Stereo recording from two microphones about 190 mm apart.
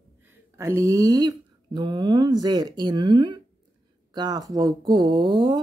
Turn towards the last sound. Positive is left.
turn(degrees=-25)  # may be behind; listen again after turning